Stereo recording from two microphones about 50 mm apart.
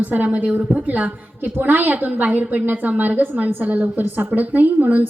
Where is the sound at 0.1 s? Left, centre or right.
Right.